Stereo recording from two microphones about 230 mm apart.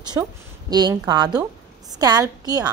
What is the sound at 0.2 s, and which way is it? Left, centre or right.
A woman's voice, centre.